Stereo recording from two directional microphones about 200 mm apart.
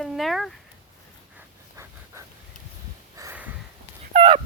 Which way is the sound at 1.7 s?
15° right (ahead or behind).